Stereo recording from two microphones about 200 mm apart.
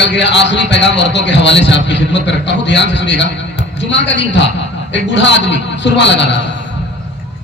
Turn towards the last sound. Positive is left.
turn(degrees=60)  # may be behind; listen again after turning